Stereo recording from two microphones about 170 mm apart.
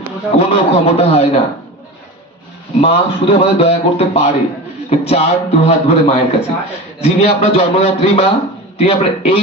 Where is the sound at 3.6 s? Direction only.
35° left (ahead or behind).